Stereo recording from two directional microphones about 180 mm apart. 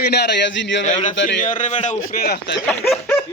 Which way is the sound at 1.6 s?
35° left (ahead or behind).